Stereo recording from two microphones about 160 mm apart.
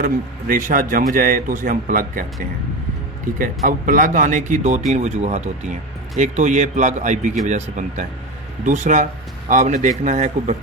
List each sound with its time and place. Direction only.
0.0 s a man's voice: 55° right (ahead or behind)
3.3 s speech: 55° right (ahead or behind)